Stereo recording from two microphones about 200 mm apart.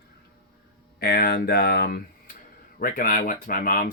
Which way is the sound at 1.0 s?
50° left (ahead or behind).